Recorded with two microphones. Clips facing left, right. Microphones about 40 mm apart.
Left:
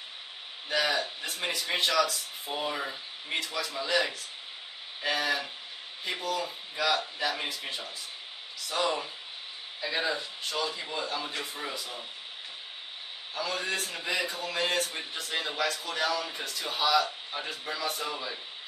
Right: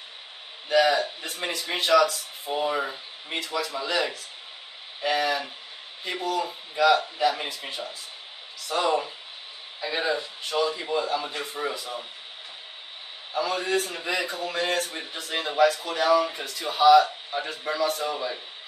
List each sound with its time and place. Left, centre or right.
0.7 s a man's voice: centre
13.3 s speech: centre
17.7 s speech: centre
18.0 s speech: centre